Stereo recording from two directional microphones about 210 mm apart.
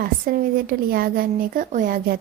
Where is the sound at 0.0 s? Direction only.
45° right (ahead or behind).